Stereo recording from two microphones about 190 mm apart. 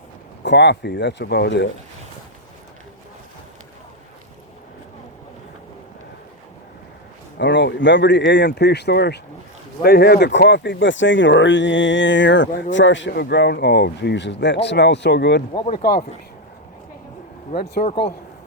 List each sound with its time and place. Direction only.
0.4 s speech: 65° left (ahead or behind)
7.3 s speech: 65° left (ahead or behind)
15.6 s speech: 50° left (ahead or behind)
17.5 s speech: 55° left (ahead or behind)